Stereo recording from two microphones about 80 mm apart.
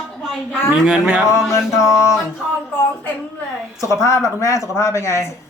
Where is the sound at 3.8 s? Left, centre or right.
Left.